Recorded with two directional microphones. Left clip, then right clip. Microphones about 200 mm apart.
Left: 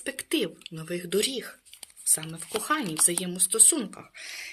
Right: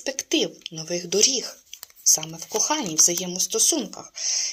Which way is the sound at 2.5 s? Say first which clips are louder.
Right 3 dB; 15° left (ahead or behind).